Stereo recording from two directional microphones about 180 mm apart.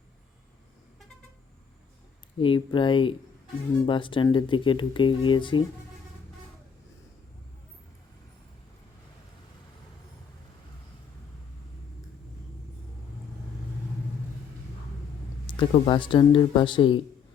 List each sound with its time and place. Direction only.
2.4 s speech: 30° left (ahead or behind)
15.4 s speech: 25° left (ahead or behind)